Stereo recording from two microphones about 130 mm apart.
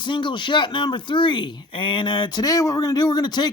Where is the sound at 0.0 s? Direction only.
35° left (ahead or behind).